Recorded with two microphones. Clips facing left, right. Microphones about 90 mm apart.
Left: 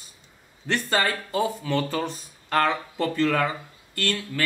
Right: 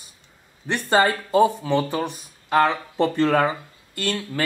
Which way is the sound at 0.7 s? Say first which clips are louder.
Right 5 dB; 25° right (ahead or behind).